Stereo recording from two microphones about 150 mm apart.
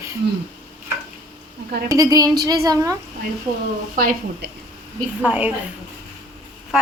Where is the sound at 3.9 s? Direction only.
75° right (ahead or behind).